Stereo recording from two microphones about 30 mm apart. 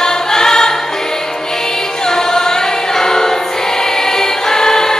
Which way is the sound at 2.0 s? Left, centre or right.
Centre.